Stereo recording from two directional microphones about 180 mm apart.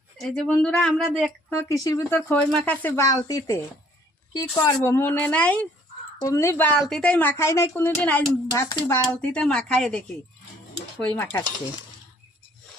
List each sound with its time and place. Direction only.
0.2 s speech: 5° left (ahead or behind)
1.5 s a woman's voice: 15° left (ahead or behind)
11.0 s a woman's voice: 10° left (ahead or behind)